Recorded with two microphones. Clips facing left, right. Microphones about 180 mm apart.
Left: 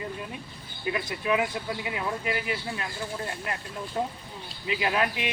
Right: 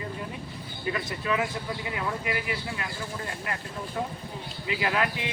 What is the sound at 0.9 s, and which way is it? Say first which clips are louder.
Speech: left 2 dB; 20° left (ahead or behind).